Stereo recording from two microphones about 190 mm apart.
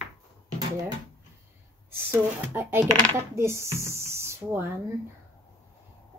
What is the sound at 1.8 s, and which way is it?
Speech, 15° right (ahead or behind).